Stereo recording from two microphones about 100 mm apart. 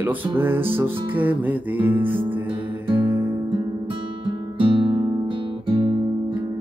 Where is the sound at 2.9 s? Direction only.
55° right (ahead or behind).